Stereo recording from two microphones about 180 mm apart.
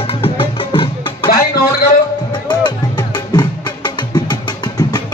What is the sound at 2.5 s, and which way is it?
Music, 25° left (ahead or behind).